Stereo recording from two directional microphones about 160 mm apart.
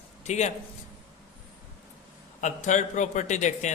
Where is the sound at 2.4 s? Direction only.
50° left (ahead or behind).